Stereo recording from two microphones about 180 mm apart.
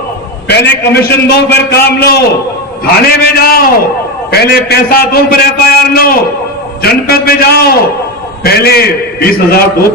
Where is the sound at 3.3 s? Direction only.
60° left (ahead or behind).